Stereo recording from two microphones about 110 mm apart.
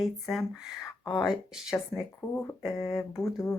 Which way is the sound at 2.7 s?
25° left (ahead or behind).